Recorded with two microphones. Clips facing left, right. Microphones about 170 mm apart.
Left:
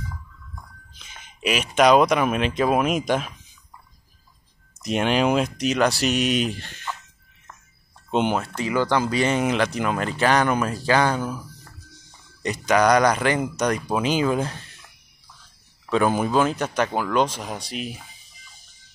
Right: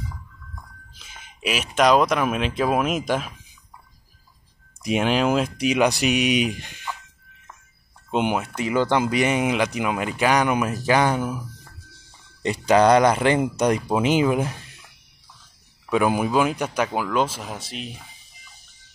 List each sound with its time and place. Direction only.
0.9 s speech: 5° right (ahead or behind)
4.8 s speech: 5° right (ahead or behind)
8.1 s speech: 10° right (ahead or behind)
12.4 s speech: 30° right (ahead or behind)
15.9 s speech: 10° right (ahead or behind)